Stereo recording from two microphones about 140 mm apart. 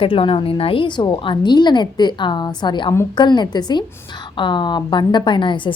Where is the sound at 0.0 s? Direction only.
40° left (ahead or behind).